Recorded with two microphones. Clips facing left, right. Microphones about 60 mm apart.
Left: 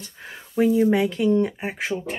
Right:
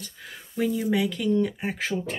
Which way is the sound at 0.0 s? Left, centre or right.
Left.